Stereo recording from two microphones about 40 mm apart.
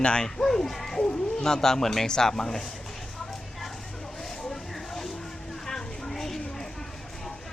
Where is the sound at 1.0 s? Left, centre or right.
Left.